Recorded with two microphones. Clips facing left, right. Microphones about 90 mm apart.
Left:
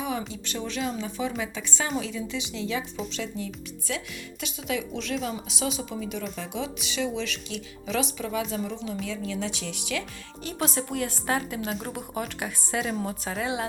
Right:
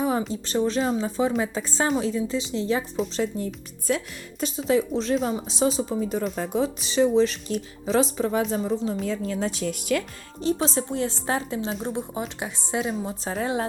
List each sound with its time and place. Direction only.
0.0 s a sound: 35° right (ahead or behind)
0.4 s speech: 35° right (ahead or behind)
10.4 s a woman's voice: 30° right (ahead or behind)
13.2 s speech: 35° right (ahead or behind)